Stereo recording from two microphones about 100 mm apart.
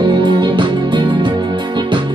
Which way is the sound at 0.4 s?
50° right (ahead or behind).